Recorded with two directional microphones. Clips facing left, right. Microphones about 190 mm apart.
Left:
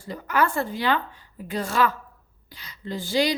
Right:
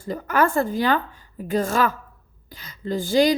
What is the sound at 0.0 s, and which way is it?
Speech, 45° right (ahead or behind).